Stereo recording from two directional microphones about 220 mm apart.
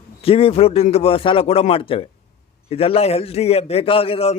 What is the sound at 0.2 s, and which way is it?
A man's voice, 25° left (ahead or behind).